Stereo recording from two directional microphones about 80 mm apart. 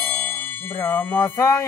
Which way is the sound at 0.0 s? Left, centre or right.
Centre.